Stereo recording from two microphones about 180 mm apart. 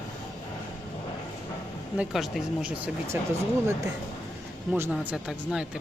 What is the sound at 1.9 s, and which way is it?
Speech, centre (ahead or behind).